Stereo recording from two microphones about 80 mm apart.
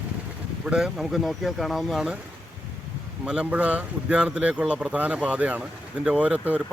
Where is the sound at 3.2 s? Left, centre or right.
Centre.